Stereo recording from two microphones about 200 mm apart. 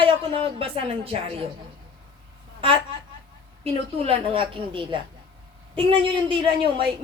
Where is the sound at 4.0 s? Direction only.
25° right (ahead or behind).